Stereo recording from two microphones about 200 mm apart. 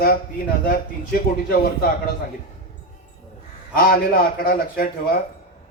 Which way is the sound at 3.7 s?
45° left (ahead or behind).